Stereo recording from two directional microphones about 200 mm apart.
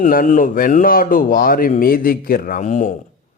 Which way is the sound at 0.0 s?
40° left (ahead or behind).